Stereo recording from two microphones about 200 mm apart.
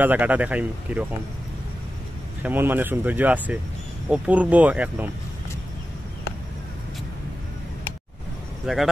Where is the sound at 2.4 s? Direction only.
10° right (ahead or behind).